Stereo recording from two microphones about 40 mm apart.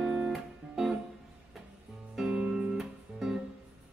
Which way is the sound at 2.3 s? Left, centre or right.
Right.